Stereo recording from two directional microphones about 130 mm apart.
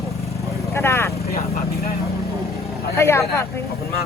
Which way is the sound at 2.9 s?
20° left (ahead or behind).